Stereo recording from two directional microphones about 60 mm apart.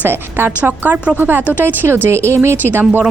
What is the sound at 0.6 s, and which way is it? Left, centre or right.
Speech, right.